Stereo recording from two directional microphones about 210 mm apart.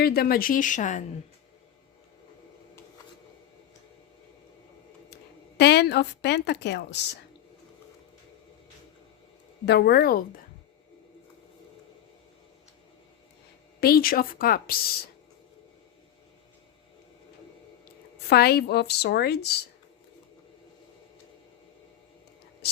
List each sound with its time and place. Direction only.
0.0 s speech: 45° left (ahead or behind)
5.1 s speech: 50° left (ahead or behind)
9.6 s a woman's voice: 50° left (ahead or behind)
13.8 s a woman's voice: 45° left (ahead or behind)
18.3 s a woman's voice: 50° left (ahead or behind)